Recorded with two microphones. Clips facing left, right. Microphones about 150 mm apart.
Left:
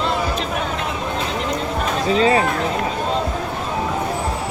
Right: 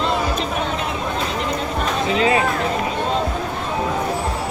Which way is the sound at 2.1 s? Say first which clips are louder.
Left 2 dB; 30° left (ahead or behind).